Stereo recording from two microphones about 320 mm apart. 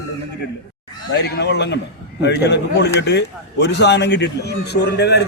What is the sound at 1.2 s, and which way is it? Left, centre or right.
A man's voice, left.